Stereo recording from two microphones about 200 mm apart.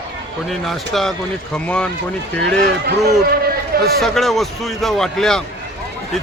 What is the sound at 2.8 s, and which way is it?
Speech, 50° right (ahead or behind).